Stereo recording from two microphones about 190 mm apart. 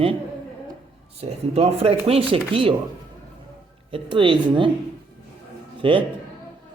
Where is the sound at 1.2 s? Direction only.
30° right (ahead or behind).